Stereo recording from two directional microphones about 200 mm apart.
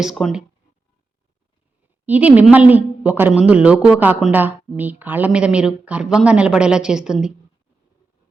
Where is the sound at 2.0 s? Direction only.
5° right (ahead or behind).